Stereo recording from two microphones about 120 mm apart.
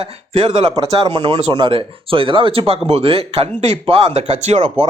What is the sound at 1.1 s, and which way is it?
Speech, 45° right (ahead or behind).